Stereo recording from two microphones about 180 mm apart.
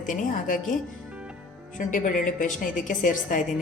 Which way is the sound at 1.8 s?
50° left (ahead or behind).